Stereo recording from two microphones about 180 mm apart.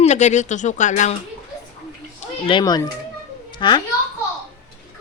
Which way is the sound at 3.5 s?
25° left (ahead or behind).